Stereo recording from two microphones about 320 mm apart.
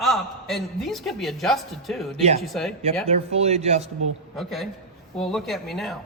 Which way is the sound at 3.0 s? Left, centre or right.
Centre.